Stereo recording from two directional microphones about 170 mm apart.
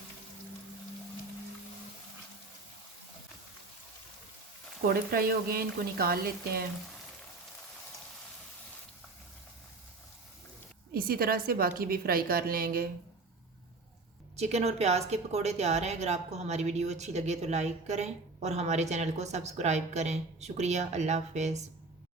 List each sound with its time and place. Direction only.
4.9 s a woman's voice: 60° right (ahead or behind)
10.9 s a woman's voice: 60° right (ahead or behind)
14.3 s a woman's voice: 40° right (ahead or behind)